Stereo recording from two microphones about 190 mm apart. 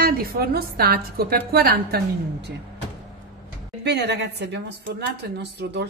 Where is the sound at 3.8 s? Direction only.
60° right (ahead or behind).